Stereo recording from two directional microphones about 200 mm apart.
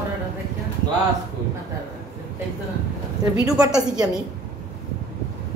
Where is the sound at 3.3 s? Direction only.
20° right (ahead or behind).